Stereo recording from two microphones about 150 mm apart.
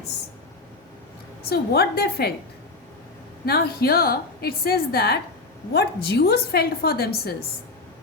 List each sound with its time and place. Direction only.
1.5 s a woman's voice: 90° left
3.4 s a woman's voice: 90° left